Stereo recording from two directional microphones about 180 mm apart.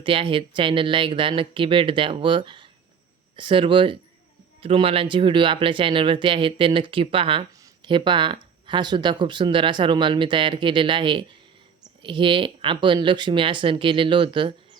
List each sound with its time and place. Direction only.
0.0 s speech: 30° right (ahead or behind)